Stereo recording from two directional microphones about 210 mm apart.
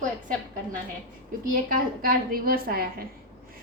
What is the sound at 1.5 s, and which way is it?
A woman's voice, 40° right (ahead or behind).